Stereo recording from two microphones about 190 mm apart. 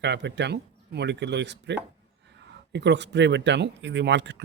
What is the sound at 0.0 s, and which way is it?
Speech, 65° right (ahead or behind).